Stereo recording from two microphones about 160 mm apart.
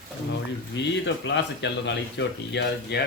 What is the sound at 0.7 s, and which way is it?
Speech, 90° left.